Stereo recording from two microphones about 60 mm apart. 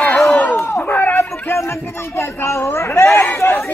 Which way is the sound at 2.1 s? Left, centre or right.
Left.